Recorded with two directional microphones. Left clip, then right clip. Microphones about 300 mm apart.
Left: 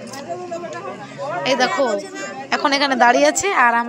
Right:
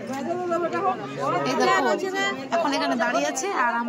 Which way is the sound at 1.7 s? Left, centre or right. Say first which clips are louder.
Left 2 dB; centre.